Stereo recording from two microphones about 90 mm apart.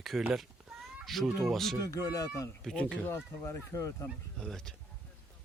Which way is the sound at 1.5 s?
5° left (ahead or behind).